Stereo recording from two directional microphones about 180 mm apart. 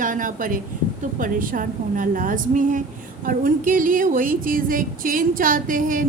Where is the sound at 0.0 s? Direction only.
45° right (ahead or behind).